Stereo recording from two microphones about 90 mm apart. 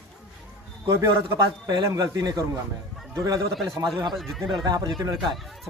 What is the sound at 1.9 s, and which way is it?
Speech, 45° right (ahead or behind).